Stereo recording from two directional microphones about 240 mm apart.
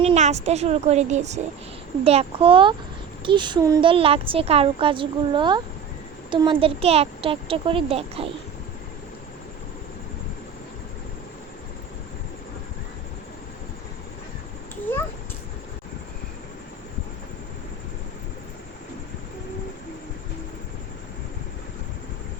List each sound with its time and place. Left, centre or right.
0.0 s a woman's voice: right